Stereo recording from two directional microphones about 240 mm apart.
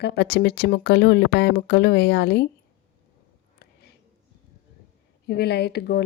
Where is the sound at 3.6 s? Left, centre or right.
Left.